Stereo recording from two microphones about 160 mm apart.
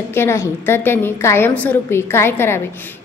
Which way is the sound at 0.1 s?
15° left (ahead or behind).